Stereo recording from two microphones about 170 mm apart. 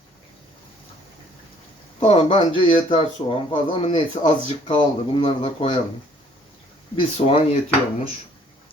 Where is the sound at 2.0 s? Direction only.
35° left (ahead or behind).